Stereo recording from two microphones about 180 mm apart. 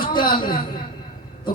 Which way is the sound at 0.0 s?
25° left (ahead or behind).